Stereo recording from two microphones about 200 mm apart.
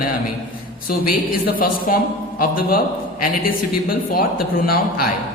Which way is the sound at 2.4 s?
45° left (ahead or behind).